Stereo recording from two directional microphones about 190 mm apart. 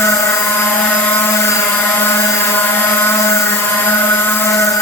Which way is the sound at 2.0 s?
10° left (ahead or behind).